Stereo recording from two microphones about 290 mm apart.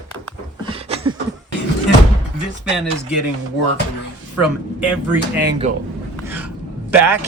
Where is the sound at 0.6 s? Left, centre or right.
Centre.